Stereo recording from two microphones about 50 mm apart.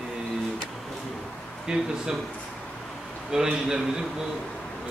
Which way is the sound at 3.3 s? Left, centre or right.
Centre.